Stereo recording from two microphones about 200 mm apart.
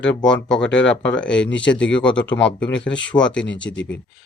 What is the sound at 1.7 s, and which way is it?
Speech, 5° left (ahead or behind).